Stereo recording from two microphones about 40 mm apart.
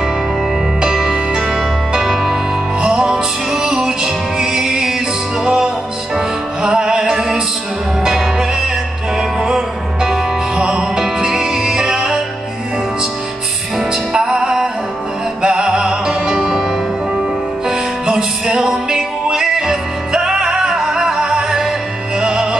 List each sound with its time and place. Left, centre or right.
0.7 s music: centre
5.4 s music: right
10.0 s music: centre
14.1 s music: centre
17.6 s music: centre